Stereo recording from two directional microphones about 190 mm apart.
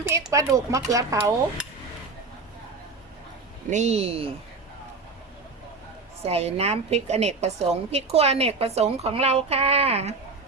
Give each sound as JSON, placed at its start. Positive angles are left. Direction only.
{"t": 0.1, "sound": "speech", "side_deg": -15}
{"t": 3.7, "sound": "a woman's voice", "side_deg": -35}
{"t": 6.2, "sound": "a woman's voice", "side_deg": -35}